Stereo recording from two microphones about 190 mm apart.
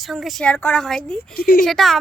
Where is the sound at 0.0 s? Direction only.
Centre (ahead or behind).